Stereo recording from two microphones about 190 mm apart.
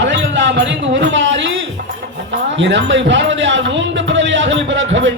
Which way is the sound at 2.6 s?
70° right (ahead or behind).